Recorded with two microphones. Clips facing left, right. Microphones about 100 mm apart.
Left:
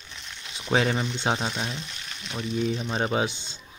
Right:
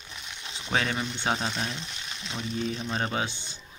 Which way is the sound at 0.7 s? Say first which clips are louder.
Left 5 dB; 25° left (ahead or behind).